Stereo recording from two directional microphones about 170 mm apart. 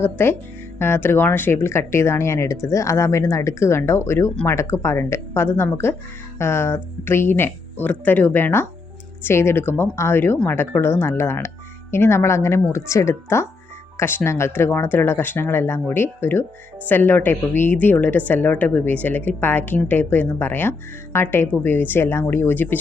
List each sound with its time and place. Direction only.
0.0 s speech: 15° left (ahead or behind)
13.9 s music: 15° left (ahead or behind)
14.3 s speech: 15° left (ahead or behind)